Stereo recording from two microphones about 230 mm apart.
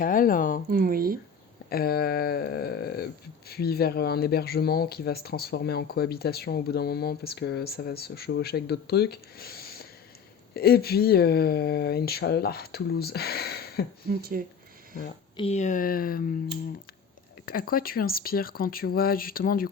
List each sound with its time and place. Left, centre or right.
0.0 s speech: left
0.7 s speech: right
1.7 s speech: left
14.1 s speech: right
15.4 s speech: left
17.4 s speech: left